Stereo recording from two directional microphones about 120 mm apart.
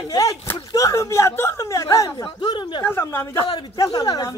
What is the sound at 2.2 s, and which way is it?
Speech, 40° left (ahead or behind).